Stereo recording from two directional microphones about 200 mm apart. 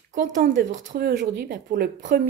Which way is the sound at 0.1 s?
40° right (ahead or behind).